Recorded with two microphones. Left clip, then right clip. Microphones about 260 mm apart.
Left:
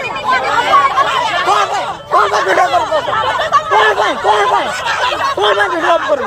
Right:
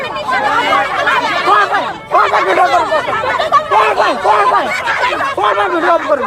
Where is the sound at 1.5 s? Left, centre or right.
Left.